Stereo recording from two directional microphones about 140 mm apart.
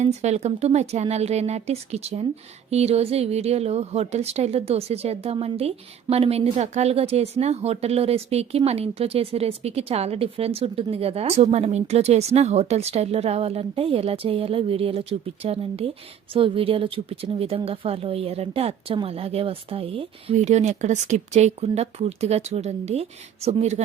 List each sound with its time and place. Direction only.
0.0 s a woman's voice: 50° right (ahead or behind)